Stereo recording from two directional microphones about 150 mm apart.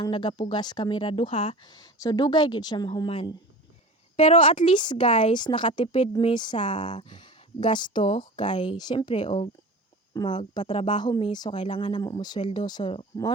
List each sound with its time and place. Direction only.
0.0 s speech: 30° left (ahead or behind)
1.7 s speech: 25° left (ahead or behind)
4.2 s speech: 40° left (ahead or behind)